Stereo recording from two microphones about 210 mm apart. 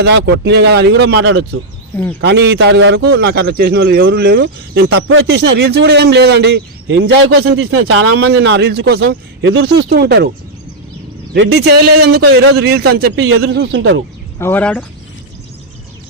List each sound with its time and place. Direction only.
0.0 s speech: 55° right (ahead or behind)
4.9 s speech: 70° right (ahead or behind); by 6.6 s 50° right (ahead or behind)
6.8 s speech: 75° right (ahead or behind); by 8.1 s 90° right
8.1 s speech: 50° right (ahead or behind)
11.3 s speech: 50° right (ahead or behind)
13.1 s speech: 80° right
13.5 s speech: 55° right (ahead or behind)
14.3 s speech: 10° left (ahead or behind)